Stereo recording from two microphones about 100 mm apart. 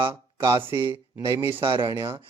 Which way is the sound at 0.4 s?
25° right (ahead or behind).